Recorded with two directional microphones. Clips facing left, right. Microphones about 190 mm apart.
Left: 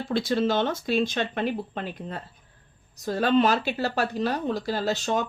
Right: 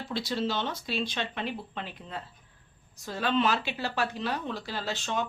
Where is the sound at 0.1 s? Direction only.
50° left (ahead or behind).